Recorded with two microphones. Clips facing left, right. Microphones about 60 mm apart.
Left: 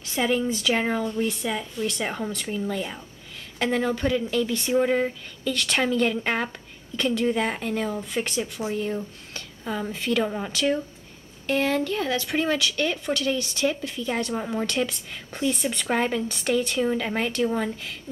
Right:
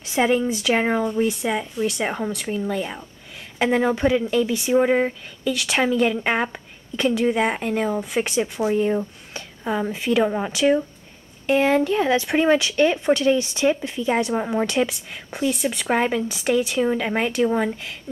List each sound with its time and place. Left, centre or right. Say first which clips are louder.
0.4 s speech: right 3 dB; centre
0.7 s a woman's voice: right 4 dB; right
5.5 s a woman's voice: right 3 dB; centre
15.5 s speech: right 3 dB; centre